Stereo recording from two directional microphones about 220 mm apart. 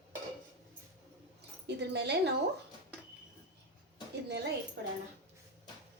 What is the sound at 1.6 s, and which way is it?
Speech, 50° right (ahead or behind).